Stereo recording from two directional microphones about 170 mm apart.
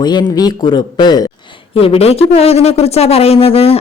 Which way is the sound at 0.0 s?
25° left (ahead or behind).